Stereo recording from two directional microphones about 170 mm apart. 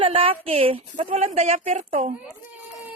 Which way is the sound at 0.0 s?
35° right (ahead or behind).